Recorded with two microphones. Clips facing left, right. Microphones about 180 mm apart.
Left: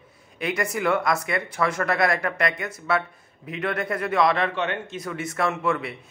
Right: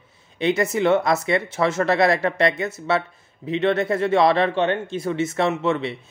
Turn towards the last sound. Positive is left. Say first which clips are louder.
# right 4 dB
turn(degrees=-25)  # may be behind; listen again after turning